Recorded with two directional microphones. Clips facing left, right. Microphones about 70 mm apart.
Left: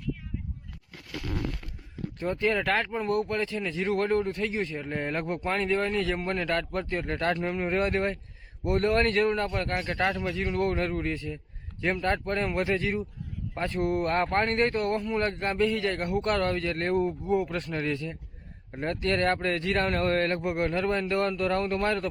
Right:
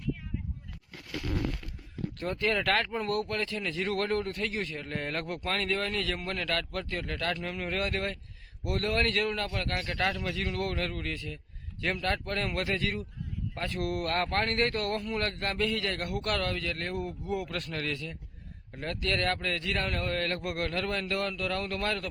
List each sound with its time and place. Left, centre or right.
2.1 s speech: centre; by 17.2 s left
17.2 s speech: left